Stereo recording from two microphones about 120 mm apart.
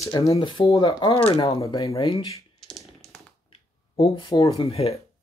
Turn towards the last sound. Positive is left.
turn(degrees=55)  # may be behind; listen again after turning